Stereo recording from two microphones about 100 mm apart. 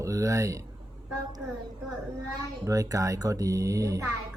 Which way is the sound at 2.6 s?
35° right (ahead or behind).